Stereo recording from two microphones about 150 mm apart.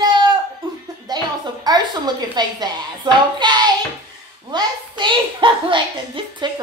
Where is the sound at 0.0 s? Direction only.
30° right (ahead or behind).